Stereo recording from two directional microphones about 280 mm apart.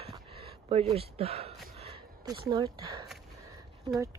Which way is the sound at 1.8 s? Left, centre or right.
Centre.